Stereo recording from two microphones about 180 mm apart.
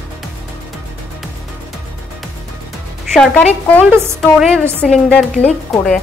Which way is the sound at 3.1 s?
5° left (ahead or behind).